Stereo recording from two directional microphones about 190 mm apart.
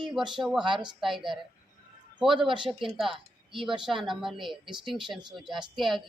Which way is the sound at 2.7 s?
Centre (ahead or behind).